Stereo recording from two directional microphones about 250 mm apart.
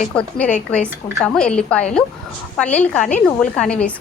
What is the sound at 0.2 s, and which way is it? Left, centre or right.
A woman's voice, centre.